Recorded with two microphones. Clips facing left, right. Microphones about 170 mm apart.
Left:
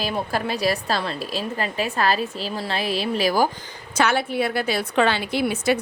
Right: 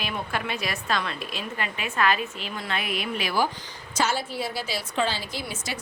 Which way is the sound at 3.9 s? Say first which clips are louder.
Left 5 dB; 60° left (ahead or behind).